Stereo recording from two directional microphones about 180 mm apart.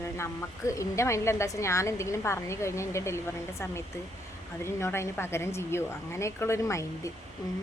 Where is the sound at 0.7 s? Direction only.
15° left (ahead or behind).